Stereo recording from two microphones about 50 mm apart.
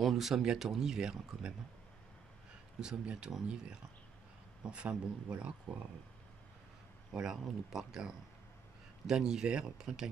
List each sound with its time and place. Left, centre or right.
0.0 s speech: centre
2.8 s speech: centre
7.1 s speech: centre